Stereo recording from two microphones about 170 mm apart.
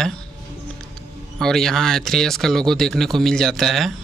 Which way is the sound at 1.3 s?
5° left (ahead or behind).